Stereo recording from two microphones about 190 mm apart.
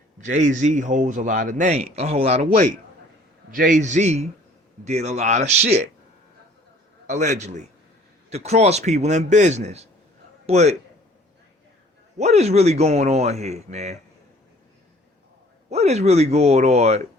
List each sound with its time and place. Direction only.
0.2 s a man's voice: 40° right (ahead or behind)
2.4 s a man's voice: 50° right (ahead or behind)
7.1 s a man's voice: 40° right (ahead or behind)
12.1 s a man's voice: 35° right (ahead or behind)
15.7 s a man's voice: 35° right (ahead or behind)